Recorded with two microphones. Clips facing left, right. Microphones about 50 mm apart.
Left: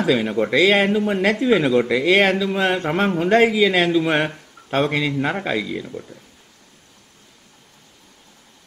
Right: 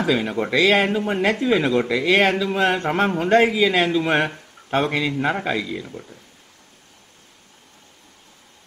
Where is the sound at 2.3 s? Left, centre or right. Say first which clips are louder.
Left 1 dB; centre.